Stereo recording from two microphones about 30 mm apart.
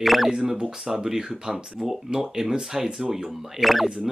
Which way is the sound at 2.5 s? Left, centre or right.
Centre.